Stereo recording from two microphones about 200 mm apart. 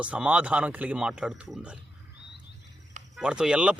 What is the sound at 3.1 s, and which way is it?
Speech, 5° right (ahead or behind).